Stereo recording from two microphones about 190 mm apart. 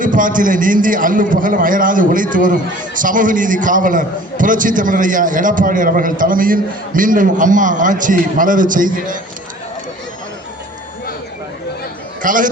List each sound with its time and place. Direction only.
0.0 s a man's voice: 45° right (ahead or behind)
12.2 s a man's voice: 45° right (ahead or behind)